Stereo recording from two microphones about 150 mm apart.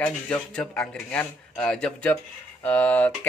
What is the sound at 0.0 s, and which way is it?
Speech, 10° left (ahead or behind).